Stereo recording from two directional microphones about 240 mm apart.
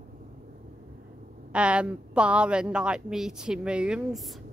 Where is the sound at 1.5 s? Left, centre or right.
Centre.